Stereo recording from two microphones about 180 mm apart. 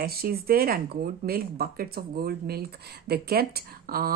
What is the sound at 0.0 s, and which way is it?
Speech, 55° right (ahead or behind).